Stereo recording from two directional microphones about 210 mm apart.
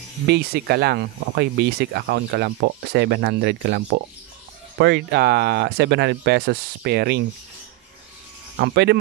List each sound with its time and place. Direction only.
0.3 s speech: 50° right (ahead or behind)
8.5 s speech: 50° right (ahead or behind)